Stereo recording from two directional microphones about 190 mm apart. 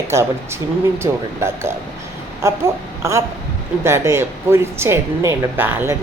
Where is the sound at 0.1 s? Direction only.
15° right (ahead or behind).